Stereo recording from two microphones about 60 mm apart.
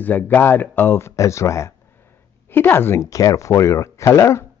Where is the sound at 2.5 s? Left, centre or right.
Left.